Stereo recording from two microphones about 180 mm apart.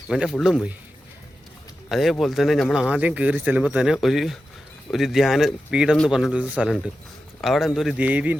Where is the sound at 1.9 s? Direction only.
Centre (ahead or behind).